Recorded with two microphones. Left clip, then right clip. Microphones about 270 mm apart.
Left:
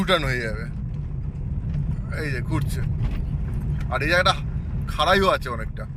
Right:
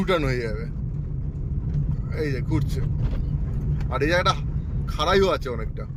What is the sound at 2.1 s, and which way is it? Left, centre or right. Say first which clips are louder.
Speech: right 1 dB; centre.